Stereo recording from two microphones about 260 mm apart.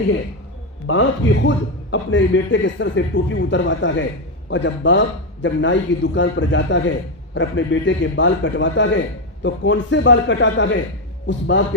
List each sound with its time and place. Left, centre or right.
0.9 s a man's voice: left